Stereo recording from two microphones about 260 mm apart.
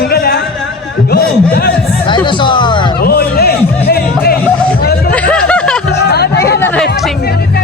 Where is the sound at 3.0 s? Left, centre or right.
Left.